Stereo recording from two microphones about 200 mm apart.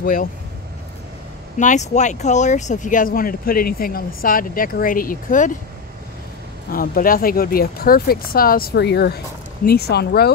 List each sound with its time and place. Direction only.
0.0 s speech: 45° left (ahead or behind)
1.6 s speech: 40° left (ahead or behind)
6.7 s speech: 45° left (ahead or behind)